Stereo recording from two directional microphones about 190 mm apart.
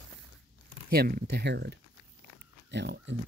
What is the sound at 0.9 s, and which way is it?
Speech, 55° right (ahead or behind).